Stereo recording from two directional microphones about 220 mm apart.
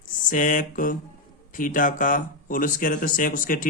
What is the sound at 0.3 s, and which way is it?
Speech, 35° left (ahead or behind).